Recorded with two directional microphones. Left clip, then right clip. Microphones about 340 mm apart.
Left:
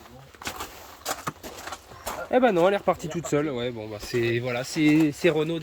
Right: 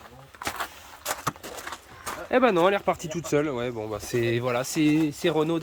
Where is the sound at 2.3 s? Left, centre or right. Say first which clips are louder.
Even; centre.